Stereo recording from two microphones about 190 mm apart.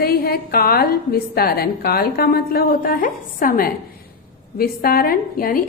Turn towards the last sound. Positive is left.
turn(degrees=50)  # may be behind; listen again after turning